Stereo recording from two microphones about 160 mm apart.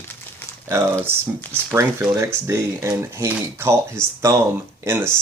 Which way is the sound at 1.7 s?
15° right (ahead or behind).